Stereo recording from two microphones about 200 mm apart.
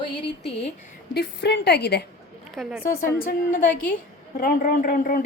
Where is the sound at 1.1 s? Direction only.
55° left (ahead or behind).